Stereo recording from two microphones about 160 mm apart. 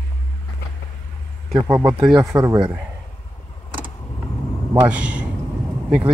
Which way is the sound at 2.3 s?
20° right (ahead or behind).